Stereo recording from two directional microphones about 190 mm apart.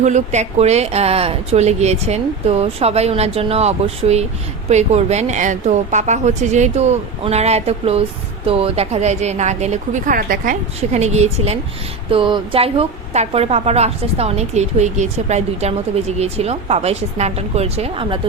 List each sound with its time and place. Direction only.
0.0 s a woman's voice: 40° right (ahead or behind)